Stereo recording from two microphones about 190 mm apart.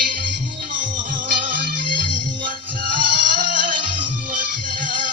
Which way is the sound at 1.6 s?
50° right (ahead or behind).